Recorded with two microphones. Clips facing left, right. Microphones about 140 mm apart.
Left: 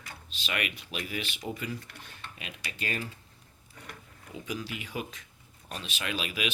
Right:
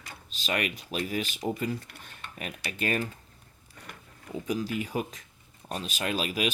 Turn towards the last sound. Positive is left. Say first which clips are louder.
# right 4 dB
turn(degrees=-40)  # may be behind; listen again after turning